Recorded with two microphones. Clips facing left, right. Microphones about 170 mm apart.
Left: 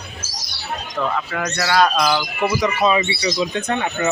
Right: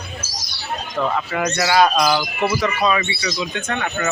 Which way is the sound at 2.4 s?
20° left (ahead or behind).